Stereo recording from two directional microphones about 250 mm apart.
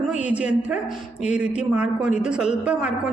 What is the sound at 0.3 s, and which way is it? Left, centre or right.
A woman's voice, centre.